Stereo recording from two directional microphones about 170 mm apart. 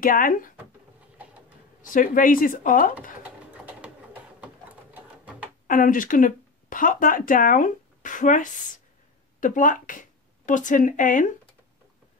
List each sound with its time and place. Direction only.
0.0 s speech: 55° left (ahead or behind)
1.8 s speech: 55° left (ahead or behind)
3.8 s pigeon: 10° right (ahead or behind)
4.9 s printer: 10° right (ahead or behind)
5.7 s speech: 55° left (ahead or behind)